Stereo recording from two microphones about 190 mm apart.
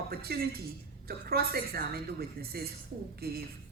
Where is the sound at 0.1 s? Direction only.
55° right (ahead or behind).